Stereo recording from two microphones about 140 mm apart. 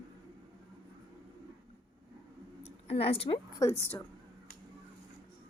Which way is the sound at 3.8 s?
15° left (ahead or behind).